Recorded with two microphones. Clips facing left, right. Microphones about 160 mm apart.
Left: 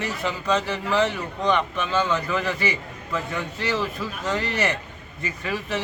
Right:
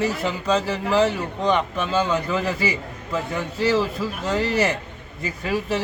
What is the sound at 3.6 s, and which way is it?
Speech, 5° right (ahead or behind).